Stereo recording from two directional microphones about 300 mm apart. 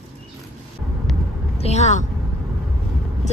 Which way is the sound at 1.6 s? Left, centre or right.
Left.